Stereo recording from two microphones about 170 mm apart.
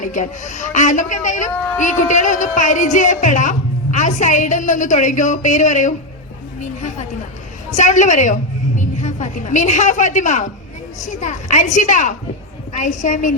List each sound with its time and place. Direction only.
0.0 s a man's voice: 45° left (ahead or behind)
7.7 s a man's voice: 45° left (ahead or behind)